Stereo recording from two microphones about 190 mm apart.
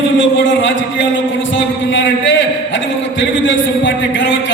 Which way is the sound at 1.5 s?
75° left (ahead or behind).